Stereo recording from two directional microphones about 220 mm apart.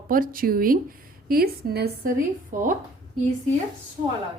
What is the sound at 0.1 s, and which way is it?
A woman's voice, 40° right (ahead or behind).